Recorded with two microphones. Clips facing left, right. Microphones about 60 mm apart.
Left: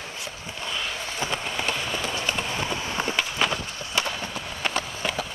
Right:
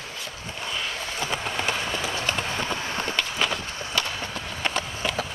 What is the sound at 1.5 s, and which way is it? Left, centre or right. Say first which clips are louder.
Train: right 1 dB; centre.